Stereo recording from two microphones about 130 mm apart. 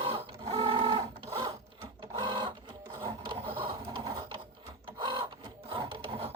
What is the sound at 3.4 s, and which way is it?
Printer, 45° right (ahead or behind).